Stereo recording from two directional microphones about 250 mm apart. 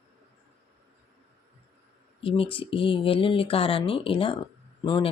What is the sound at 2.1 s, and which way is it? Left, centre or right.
Speech, left.